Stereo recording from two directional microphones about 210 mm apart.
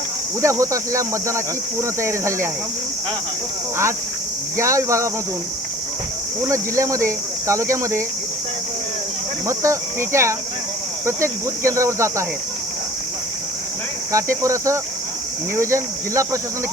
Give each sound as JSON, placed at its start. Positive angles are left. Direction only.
{"t": 0.4, "sound": "speech", "side_deg": -15}
{"t": 4.5, "sound": "speech", "side_deg": -15}
{"t": 6.5, "sound": "speech", "side_deg": -15}
{"t": 9.5, "sound": "speech", "side_deg": -15}
{"t": 14.1, "sound": "speech", "side_deg": -15}